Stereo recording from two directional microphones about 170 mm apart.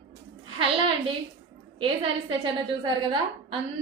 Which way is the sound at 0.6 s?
30° right (ahead or behind).